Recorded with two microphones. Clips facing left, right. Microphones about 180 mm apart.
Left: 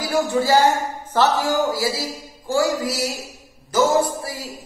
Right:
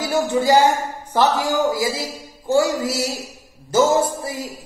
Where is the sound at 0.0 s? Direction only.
20° right (ahead or behind).